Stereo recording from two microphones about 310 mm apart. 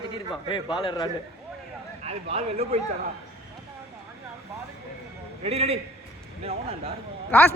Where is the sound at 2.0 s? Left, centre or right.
Right.